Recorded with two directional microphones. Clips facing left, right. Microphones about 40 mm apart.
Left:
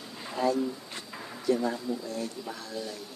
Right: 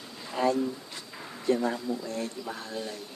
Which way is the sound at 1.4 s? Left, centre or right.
Right.